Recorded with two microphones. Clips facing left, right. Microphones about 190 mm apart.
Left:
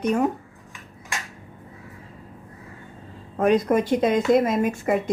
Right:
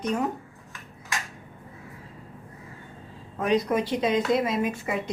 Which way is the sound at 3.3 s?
50° left (ahead or behind).